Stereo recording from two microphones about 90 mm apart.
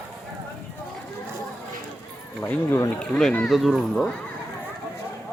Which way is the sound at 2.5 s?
25° left (ahead or behind).